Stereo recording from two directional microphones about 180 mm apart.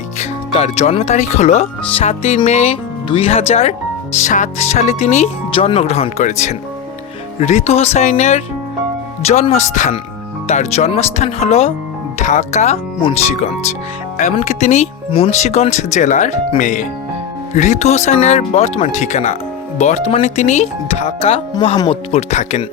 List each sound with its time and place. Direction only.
0.2 s speech: 35° left (ahead or behind)